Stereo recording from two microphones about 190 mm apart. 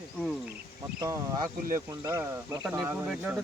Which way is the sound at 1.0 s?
20° right (ahead or behind).